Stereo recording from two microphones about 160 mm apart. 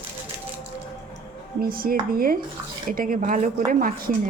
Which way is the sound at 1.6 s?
65° right (ahead or behind).